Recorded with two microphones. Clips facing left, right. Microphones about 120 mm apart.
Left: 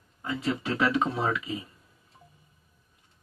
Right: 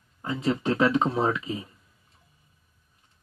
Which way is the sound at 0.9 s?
20° right (ahead or behind).